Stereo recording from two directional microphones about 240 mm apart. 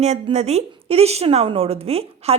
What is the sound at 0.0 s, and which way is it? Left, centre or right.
A woman's voice, right.